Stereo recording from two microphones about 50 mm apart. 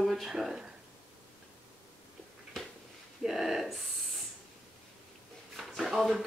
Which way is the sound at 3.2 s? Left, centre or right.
Centre.